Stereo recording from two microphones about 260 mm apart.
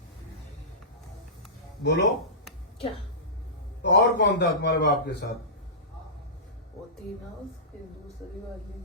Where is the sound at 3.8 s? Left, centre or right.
Left.